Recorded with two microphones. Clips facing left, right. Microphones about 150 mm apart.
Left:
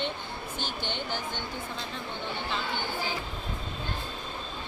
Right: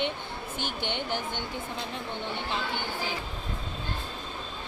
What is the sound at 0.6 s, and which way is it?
Speech, 60° right (ahead or behind).